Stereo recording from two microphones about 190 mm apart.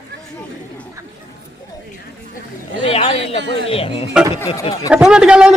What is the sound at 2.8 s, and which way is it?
Speech, 30° left (ahead or behind).